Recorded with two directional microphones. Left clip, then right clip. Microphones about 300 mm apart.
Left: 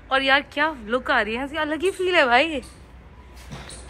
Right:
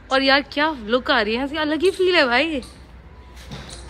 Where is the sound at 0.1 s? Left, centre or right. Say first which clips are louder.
Right 2 dB; centre.